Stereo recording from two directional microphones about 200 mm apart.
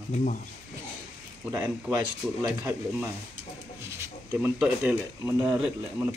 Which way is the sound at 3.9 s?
10° right (ahead or behind).